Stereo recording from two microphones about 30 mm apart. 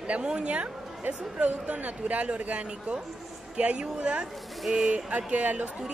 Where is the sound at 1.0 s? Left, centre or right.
Right.